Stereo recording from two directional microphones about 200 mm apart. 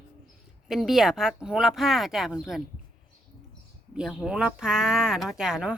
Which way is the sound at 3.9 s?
5° right (ahead or behind).